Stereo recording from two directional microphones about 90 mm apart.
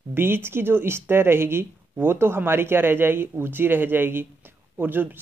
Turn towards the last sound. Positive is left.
turn(degrees=-20)  # may be behind; listen again after turning